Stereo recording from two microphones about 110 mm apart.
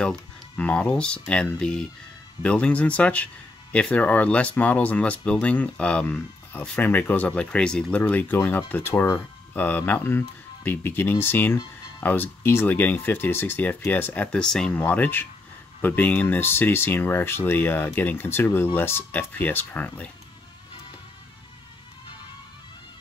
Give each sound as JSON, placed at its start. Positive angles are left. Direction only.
{"t": 0.0, "sound": "speech", "side_deg": 10}
{"t": 14.8, "sound": "speech", "side_deg": 15}